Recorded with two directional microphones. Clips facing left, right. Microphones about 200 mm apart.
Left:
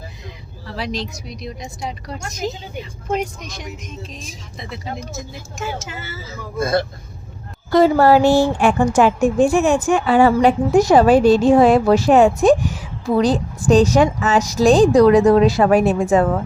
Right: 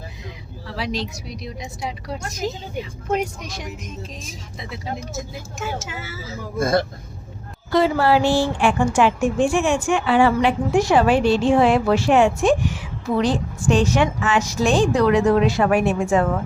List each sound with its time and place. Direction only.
0.8 s speech: 5° right (ahead or behind)
4.7 s speech: 5° right (ahead or behind)
7.7 s a woman's voice: 45° left (ahead or behind)